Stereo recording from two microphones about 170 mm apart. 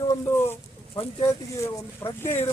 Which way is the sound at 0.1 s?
15° left (ahead or behind).